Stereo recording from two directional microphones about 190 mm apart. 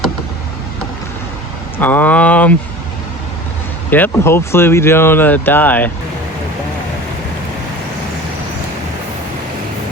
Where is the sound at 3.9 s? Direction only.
10° left (ahead or behind).